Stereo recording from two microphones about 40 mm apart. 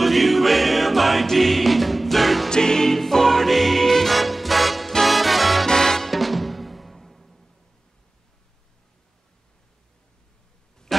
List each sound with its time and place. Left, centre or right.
0.0 s music: centre
2.5 s music: centre
5.7 s music: centre
10.9 s a sound: centre